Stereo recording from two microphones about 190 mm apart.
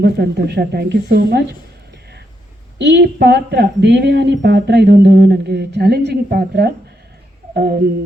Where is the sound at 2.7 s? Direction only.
65° right (ahead or behind).